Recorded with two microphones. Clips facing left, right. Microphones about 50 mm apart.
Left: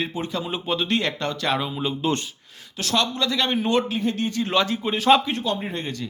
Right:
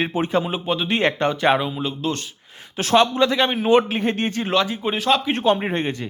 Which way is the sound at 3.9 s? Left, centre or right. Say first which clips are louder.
Right 2 dB; right.